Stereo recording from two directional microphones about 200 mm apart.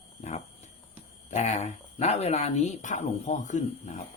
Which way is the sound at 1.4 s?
35° left (ahead or behind).